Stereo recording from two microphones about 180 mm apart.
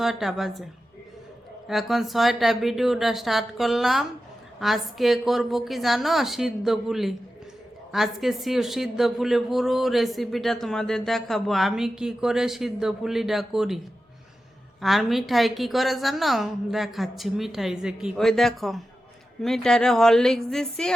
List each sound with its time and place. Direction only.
0.0 s a woman's voice: centre (ahead or behind)
1.6 s a woman's voice: centre (ahead or behind)
14.8 s a woman's voice: centre (ahead or behind)